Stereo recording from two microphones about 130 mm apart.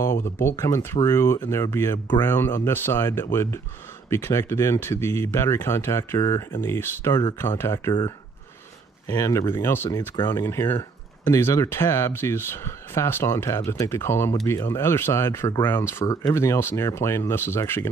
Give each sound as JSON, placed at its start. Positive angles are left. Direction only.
{"t": 0.1, "sound": "speech", "side_deg": 20}
{"t": 9.0, "sound": "speech", "side_deg": 25}